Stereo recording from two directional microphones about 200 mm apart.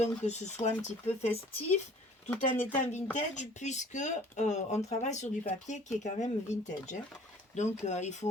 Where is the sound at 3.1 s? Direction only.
35° left (ahead or behind).